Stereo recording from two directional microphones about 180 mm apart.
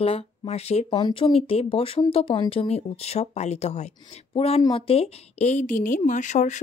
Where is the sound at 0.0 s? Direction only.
35° left (ahead or behind).